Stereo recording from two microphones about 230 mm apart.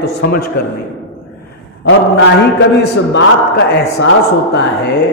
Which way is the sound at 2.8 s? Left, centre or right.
Left.